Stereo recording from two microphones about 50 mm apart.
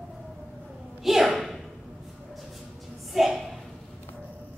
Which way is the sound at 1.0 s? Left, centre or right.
Centre.